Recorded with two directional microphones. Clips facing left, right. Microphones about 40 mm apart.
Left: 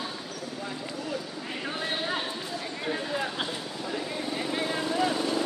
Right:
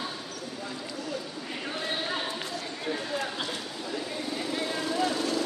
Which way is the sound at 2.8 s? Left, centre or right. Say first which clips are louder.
Left 1 dB; left.